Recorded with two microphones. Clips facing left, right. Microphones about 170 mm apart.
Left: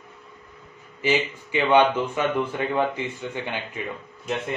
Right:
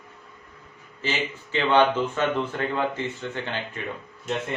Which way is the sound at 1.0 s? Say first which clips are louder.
Left 5 dB; 10° left (ahead or behind).